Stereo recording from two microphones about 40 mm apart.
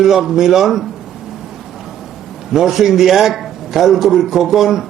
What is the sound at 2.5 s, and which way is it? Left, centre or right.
A man's voice, centre.